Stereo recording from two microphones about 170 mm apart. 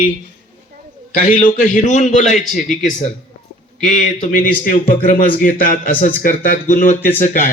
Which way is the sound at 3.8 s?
50° left (ahead or behind).